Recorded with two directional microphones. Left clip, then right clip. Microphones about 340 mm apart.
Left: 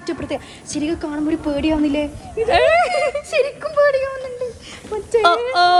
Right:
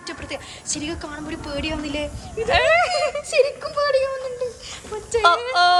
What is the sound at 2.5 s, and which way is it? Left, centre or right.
Speech, centre.